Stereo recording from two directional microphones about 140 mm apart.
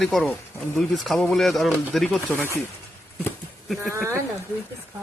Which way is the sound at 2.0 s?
15° left (ahead or behind).